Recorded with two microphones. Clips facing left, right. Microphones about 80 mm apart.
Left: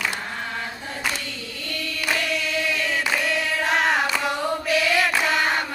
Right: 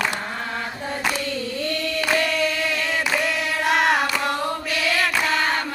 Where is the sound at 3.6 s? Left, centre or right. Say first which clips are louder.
Right 3 dB; centre.